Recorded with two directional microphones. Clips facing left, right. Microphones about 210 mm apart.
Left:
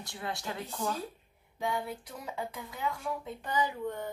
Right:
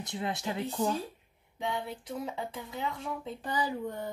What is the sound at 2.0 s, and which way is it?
Speech, 25° right (ahead or behind).